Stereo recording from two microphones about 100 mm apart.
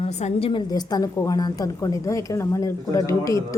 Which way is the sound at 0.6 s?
45° left (ahead or behind).